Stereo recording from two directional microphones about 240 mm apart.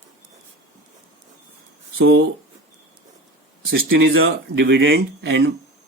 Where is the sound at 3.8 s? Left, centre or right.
Right.